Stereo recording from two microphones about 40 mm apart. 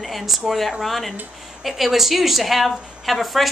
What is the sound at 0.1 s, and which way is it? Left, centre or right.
Speech, centre.